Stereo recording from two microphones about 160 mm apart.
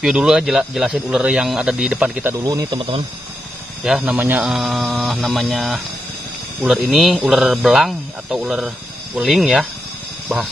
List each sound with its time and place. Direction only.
0.0 s speech: 5° right (ahead or behind); by 2.8 s 20° right (ahead or behind)
2.8 s speech: 35° right (ahead or behind)
3.8 s speech: 5° right (ahead or behind)